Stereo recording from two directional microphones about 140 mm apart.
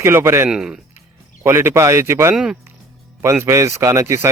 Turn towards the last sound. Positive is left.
turn(degrees=-20)  # may be behind; listen again after turning